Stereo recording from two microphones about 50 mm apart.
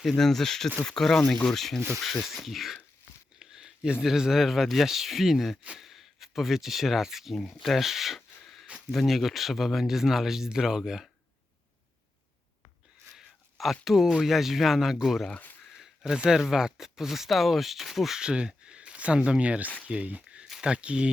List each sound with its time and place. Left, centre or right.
0.0 s speech: centre
3.3 s a sound: centre
4.0 s speech: centre
13.1 s speech: centre
15.7 s a sound: centre
16.1 s speech: centre
18.2 s speech: centre